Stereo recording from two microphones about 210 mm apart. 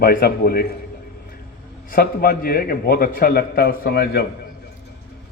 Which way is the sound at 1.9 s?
45° left (ahead or behind).